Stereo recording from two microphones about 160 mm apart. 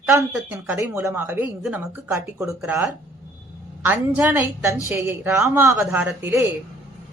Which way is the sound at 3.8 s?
10° right (ahead or behind).